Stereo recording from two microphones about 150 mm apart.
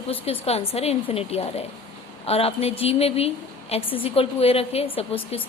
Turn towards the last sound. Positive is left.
turn(degrees=40)  # may be behind; listen again after turning